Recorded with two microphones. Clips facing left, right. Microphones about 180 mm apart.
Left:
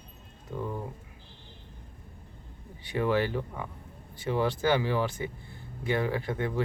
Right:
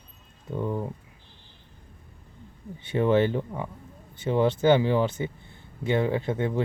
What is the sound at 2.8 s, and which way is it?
Speech, 25° right (ahead or behind).